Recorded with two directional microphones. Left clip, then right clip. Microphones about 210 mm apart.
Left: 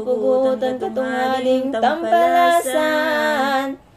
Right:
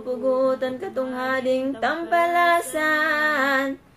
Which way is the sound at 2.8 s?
20° left (ahead or behind).